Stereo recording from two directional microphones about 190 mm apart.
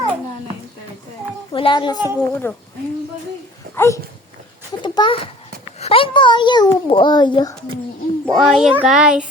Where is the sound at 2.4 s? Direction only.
10° left (ahead or behind).